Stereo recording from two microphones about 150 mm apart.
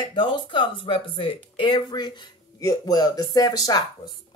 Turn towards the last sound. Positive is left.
turn(degrees=25)  # may be behind; listen again after turning